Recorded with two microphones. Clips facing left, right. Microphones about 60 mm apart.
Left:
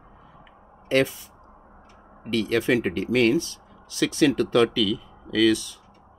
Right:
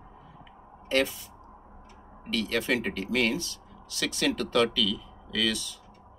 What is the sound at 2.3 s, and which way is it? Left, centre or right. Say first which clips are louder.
Speech: left 6 dB; left.